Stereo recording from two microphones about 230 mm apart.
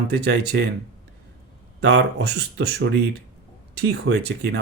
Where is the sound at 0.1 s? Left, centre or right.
Right.